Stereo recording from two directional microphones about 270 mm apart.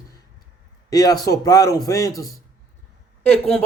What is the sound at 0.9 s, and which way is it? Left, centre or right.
A man's voice, centre.